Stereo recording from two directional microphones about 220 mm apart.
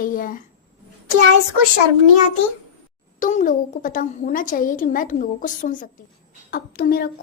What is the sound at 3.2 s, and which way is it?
A woman's voice, 35° left (ahead or behind).